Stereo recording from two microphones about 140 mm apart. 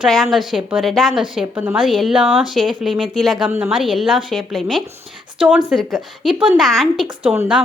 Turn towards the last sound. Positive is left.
turn(degrees=-5)  # may be behind; listen again after turning